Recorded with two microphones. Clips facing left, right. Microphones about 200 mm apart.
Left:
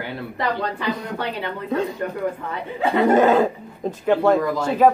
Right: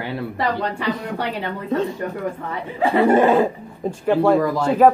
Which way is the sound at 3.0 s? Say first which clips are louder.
Even; 10° right (ahead or behind).